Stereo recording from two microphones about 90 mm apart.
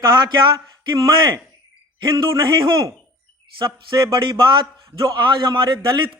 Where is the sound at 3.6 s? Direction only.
60° right (ahead or behind).